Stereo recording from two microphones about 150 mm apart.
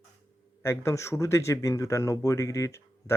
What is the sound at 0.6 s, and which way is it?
Speech, 20° left (ahead or behind).